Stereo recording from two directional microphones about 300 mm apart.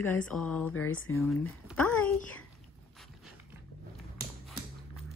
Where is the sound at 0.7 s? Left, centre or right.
Left.